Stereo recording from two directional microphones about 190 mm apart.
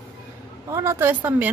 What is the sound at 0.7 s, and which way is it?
Speech, 15° right (ahead or behind).